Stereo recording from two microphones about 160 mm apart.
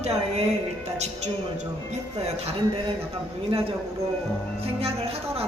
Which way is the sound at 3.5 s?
35° right (ahead or behind).